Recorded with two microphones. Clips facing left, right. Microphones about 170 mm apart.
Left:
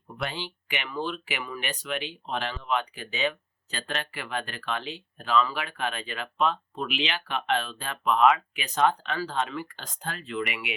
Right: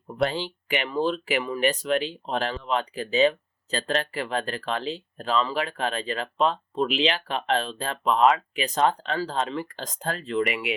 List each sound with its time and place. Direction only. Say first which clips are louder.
0.2 s speech: right 8 dB; 35° right (ahead or behind)